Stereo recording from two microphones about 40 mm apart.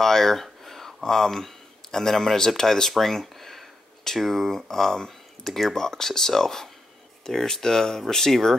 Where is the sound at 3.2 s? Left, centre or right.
Centre.